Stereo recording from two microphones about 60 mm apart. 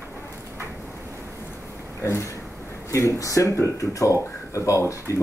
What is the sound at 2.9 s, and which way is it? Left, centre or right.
Speech, left.